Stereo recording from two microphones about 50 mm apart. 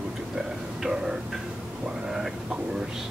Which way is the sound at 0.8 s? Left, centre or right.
Centre.